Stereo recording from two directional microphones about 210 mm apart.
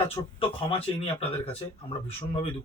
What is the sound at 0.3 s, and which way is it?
Speech, 25° left (ahead or behind).